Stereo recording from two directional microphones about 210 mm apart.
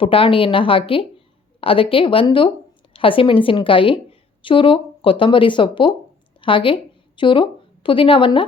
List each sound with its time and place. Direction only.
0.0 s a woman's voice: 25° left (ahead or behind)